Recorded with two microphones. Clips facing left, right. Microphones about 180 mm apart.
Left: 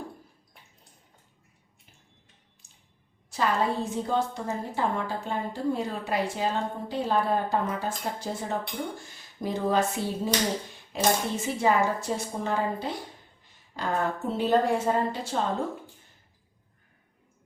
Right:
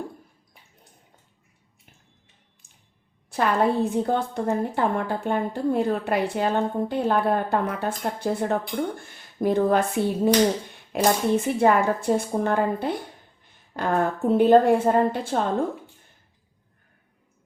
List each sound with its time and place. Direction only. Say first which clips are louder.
3.2 s a woman's voice: right 5 dB; 60° right (ahead or behind)